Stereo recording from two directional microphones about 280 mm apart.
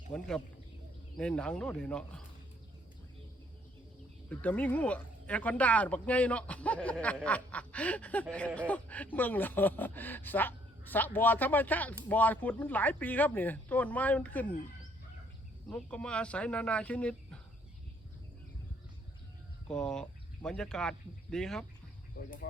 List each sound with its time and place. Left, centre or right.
0.1 s speech: centre
4.3 s speech: centre
15.7 s speech: centre
19.6 s speech: centre
22.2 s speech: left